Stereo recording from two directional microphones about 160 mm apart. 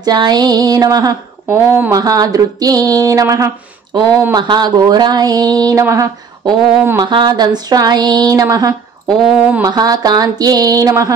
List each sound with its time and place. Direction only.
0.0 s speech: 25° right (ahead or behind)